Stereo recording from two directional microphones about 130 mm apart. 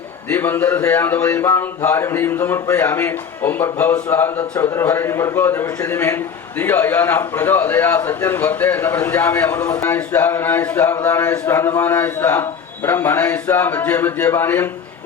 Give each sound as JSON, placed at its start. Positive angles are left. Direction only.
{"t": 0.3, "sound": "a man's voice", "side_deg": 15}